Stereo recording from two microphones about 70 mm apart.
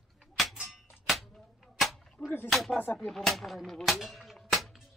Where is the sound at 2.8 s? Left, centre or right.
Left.